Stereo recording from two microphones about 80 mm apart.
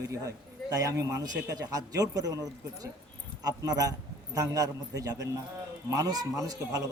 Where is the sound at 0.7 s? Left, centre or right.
Right.